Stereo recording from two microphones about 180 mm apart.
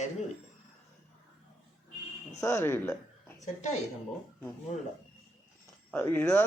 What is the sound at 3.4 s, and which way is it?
Speech, 40° left (ahead or behind).